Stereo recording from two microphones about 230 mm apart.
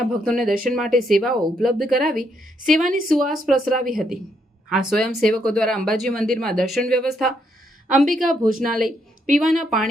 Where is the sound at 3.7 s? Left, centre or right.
Right.